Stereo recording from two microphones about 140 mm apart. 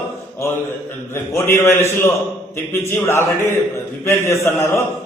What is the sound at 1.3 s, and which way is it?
Speech, 20° left (ahead or behind).